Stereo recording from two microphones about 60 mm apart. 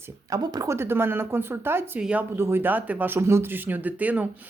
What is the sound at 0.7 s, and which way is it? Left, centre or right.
Speech, right.